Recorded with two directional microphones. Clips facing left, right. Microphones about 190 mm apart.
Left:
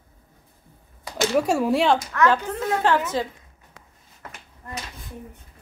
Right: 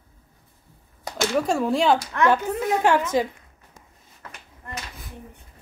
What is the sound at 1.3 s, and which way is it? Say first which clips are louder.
Speech: left 2 dB; 10° left (ahead or behind).